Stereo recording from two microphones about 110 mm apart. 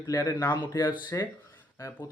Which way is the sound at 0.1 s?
30° left (ahead or behind).